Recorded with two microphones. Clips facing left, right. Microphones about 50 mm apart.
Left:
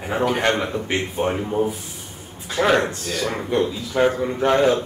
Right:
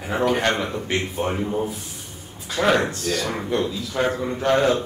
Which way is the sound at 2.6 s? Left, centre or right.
Left.